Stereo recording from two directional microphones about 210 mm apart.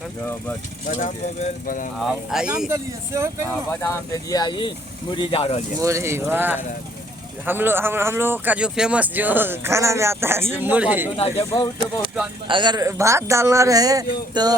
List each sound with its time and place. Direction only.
0.9 s speech: 35° left (ahead or behind)
2.0 s speech: centre (ahead or behind)
2.6 s speech: 15° right (ahead or behind)
3.7 s speech: 15° left (ahead or behind); by 5.6 s 30° left (ahead or behind)
5.8 s speech: 15° right (ahead or behind)
12.5 s speech: 20° right (ahead or behind)
14.4 s a sound: 20° right (ahead or behind)